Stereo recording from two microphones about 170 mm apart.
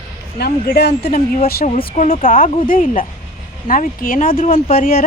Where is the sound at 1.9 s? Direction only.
45° left (ahead or behind).